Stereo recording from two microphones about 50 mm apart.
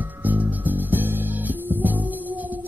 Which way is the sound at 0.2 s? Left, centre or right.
Right.